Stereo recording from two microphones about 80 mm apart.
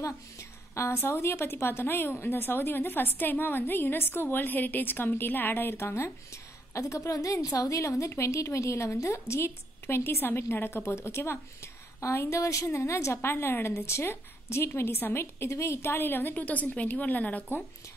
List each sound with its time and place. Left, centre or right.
0.0 s a woman's voice: left